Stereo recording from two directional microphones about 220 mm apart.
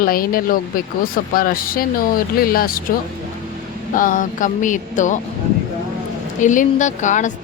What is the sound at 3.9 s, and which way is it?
Speech, 40° left (ahead or behind).